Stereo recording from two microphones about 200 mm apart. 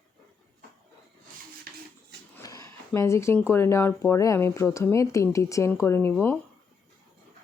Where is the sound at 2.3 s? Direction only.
15° left (ahead or behind).